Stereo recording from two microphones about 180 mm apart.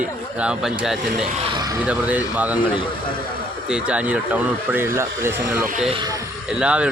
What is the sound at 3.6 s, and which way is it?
Speech, 5° right (ahead or behind).